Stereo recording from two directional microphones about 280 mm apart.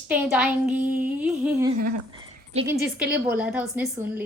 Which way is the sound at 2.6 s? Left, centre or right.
Centre.